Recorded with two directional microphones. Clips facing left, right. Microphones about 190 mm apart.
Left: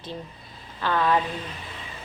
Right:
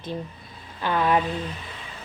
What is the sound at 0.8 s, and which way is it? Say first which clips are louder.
Speech: right 1 dB; 15° right (ahead or behind).